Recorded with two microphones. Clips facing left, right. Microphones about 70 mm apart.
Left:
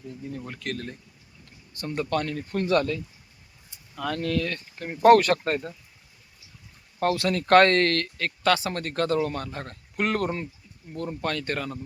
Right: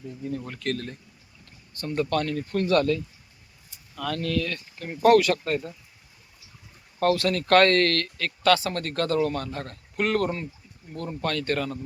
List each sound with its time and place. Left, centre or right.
0.3 s speech: centre; by 5.4 s left
7.0 s speech: left